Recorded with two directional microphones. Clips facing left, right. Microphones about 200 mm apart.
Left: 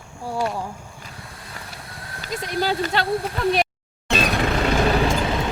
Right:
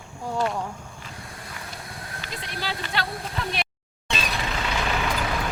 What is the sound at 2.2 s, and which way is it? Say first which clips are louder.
Speech: left 10 dB; 45° left (ahead or behind).